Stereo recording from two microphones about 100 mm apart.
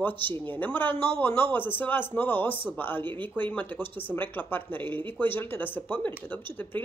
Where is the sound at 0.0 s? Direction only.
20° left (ahead or behind).